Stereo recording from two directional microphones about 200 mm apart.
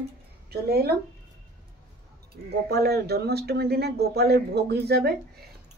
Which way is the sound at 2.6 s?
55° right (ahead or behind).